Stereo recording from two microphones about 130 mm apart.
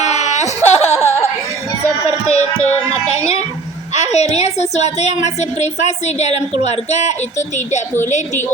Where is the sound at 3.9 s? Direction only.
60° left (ahead or behind).